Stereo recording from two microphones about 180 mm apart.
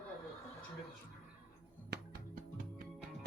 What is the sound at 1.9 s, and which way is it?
Music, 70° right (ahead or behind).